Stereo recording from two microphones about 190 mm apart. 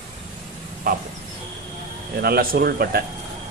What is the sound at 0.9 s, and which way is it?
Speech, 50° right (ahead or behind).